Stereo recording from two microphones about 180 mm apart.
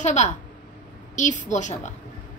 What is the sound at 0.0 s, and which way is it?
A woman's voice, 40° left (ahead or behind).